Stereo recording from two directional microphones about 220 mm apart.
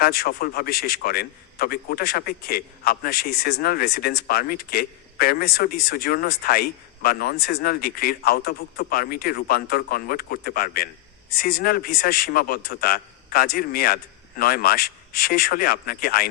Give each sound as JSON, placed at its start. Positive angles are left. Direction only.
{"t": 0.0, "sound": "a man's voice", "side_deg": 45}